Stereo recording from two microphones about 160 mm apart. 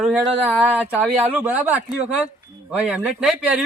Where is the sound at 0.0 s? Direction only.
5° right (ahead or behind).